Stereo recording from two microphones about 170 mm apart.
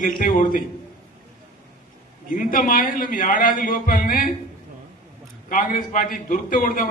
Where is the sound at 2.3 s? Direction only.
55° left (ahead or behind).